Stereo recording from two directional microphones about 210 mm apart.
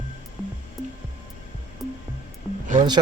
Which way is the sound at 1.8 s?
Centre (ahead or behind).